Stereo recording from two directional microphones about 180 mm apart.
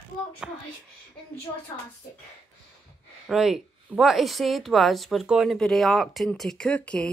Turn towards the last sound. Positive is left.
turn(degrees=5)  # may be behind; listen again after turning